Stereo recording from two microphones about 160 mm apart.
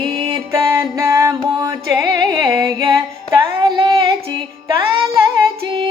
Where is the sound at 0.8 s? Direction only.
20° right (ahead or behind).